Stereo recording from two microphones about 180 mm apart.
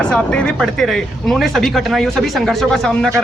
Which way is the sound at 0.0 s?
5° left (ahead or behind).